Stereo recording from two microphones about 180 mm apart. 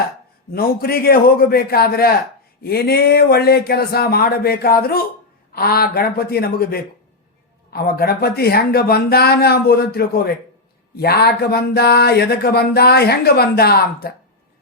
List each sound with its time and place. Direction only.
0.5 s speech: 60° left (ahead or behind)